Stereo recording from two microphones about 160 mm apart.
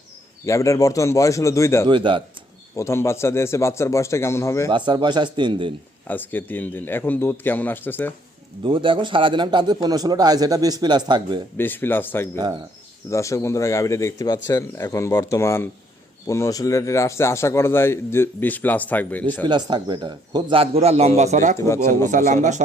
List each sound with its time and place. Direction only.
0.4 s speech: 20° left (ahead or behind)
1.9 s a man's voice: 30° right (ahead or behind)
2.7 s a man's voice: 15° left (ahead or behind)
4.7 s speech: 30° right (ahead or behind)
6.1 s a man's voice: 10° left (ahead or behind)
8.6 s speech: 30° right (ahead or behind)
11.5 s a man's voice: 10° left (ahead or behind)
19.5 s a man's voice: 25° right (ahead or behind); by 22.6 s 50° right (ahead or behind)